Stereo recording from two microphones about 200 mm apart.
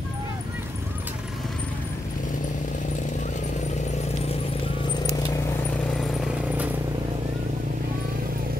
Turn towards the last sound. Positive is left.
turn(degrees=-5)  # may be behind; listen again after turning